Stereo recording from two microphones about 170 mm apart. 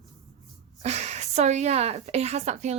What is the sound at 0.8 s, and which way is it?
Speech, 40° right (ahead or behind).